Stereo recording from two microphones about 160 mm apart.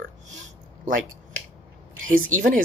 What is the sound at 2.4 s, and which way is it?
Speech, 55° right (ahead or behind).